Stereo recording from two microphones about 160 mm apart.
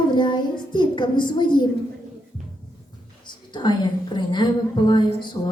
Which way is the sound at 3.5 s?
30° left (ahead or behind).